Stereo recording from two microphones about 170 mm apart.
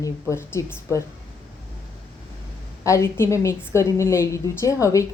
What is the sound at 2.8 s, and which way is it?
A woman's voice, 15° left (ahead or behind).